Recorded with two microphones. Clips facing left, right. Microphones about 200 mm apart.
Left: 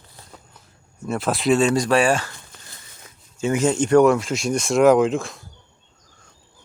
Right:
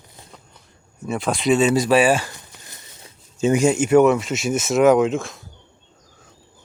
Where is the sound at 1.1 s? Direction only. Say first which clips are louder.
Even; centre (ahead or behind).